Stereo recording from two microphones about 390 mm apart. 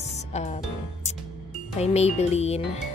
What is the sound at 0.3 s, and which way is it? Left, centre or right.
Music, centre.